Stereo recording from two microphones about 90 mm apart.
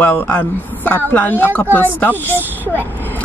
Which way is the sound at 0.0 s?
20° left (ahead or behind).